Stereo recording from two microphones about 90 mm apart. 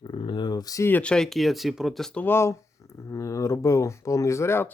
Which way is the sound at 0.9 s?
20° left (ahead or behind).